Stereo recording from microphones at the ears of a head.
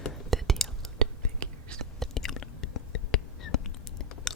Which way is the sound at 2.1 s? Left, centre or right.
Left.